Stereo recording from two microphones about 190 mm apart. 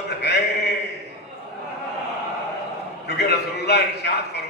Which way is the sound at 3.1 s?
60° left (ahead or behind).